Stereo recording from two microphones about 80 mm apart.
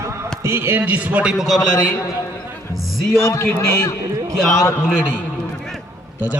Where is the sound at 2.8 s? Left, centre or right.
Centre.